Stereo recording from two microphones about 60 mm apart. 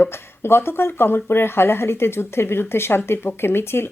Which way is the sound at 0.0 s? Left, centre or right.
Left.